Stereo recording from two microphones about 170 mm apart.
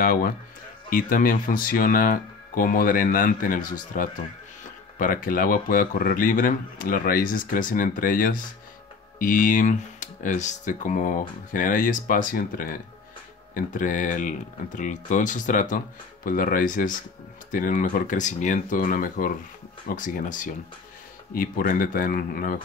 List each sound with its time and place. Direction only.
0.0 s speech: 60° left (ahead or behind)